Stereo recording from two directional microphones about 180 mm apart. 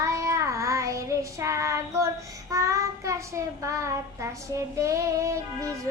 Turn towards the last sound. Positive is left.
turn(degrees=-15)  # may be behind; listen again after turning